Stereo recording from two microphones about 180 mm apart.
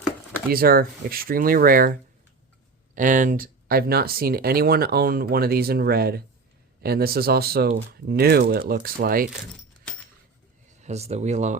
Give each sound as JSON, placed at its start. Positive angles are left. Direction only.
{"t": 0.5, "sound": "speech", "side_deg": -55}
{"t": 10.8, "sound": "speech", "side_deg": -35}